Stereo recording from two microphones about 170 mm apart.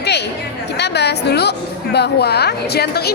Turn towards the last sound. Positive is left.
turn(degrees=70)  # may be behind; listen again after turning